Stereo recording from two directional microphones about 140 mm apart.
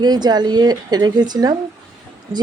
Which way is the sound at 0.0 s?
30° right (ahead or behind).